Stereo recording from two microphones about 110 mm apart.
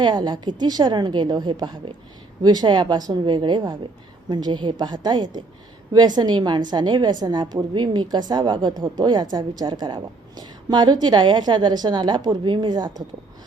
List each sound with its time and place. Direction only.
0.0 s a woman's voice: 40° right (ahead or behind)